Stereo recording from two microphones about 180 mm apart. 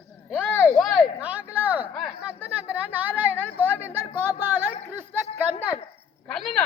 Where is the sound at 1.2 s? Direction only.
10° right (ahead or behind).